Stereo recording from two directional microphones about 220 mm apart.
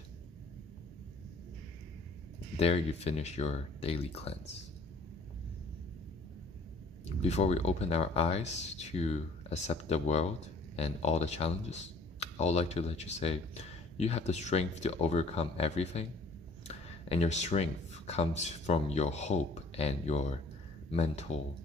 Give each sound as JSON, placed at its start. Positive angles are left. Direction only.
{"t": 2.5, "sound": "speech", "side_deg": 30}
{"t": 7.2, "sound": "speech", "side_deg": 30}